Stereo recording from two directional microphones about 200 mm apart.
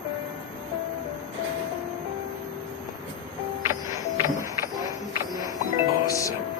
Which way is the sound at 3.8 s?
15° right (ahead or behind).